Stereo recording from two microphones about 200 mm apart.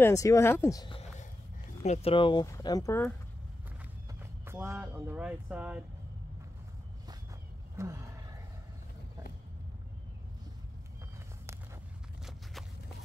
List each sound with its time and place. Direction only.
0.0 s speech: 15° left (ahead or behind)
1.8 s speech: 30° left (ahead or behind); by 3.1 s 15° left (ahead or behind)
4.1 s speech: 10° right (ahead or behind)
7.7 s speech: 15° right (ahead or behind)